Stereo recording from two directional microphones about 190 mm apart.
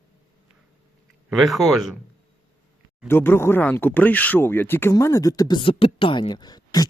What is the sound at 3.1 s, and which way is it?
Speech, 10° left (ahead or behind).